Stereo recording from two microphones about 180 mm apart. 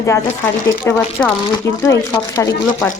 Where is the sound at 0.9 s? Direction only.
5° left (ahead or behind).